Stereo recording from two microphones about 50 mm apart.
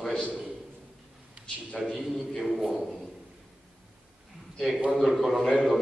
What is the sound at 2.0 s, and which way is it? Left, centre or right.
Speech, centre.